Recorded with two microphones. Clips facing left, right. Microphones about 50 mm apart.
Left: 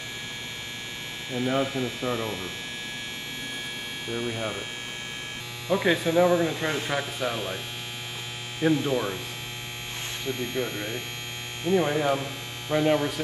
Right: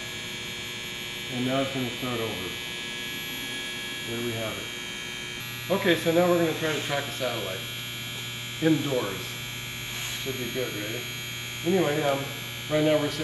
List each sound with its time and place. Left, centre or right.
1.3 s speech: centre
4.1 s speech: centre
5.7 s speech: centre
10.6 s speech: centre
11.8 s speech: centre